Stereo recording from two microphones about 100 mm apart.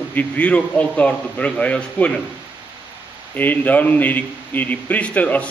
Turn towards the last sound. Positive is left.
turn(degrees=15)  # may be behind; listen again after turning